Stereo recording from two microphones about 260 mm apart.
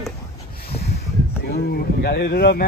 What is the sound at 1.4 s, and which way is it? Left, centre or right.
Speech, left.